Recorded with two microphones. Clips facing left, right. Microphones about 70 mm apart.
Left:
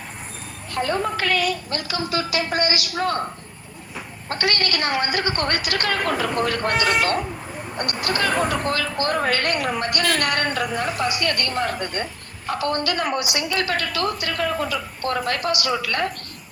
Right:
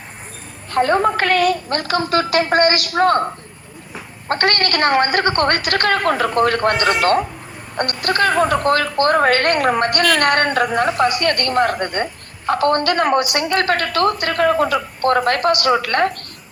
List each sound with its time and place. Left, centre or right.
0.7 s a woman's voice: right
4.3 s a woman's voice: right